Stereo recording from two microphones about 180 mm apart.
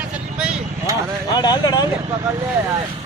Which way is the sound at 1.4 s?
20° left (ahead or behind).